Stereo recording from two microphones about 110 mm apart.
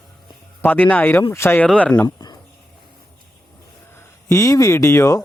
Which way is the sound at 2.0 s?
40° left (ahead or behind).